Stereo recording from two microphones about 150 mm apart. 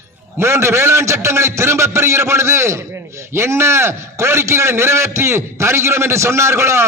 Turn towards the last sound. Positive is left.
turn(degrees=-20)  # may be behind; listen again after turning